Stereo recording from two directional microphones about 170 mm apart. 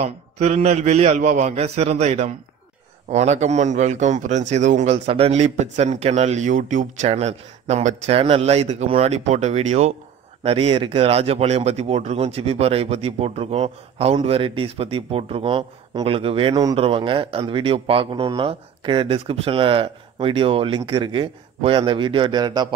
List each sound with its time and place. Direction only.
0.0 s speech: 40° right (ahead or behind); by 22.7 s 25° right (ahead or behind)